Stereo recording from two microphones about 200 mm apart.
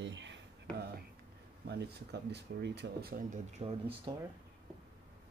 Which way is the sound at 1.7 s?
55° right (ahead or behind).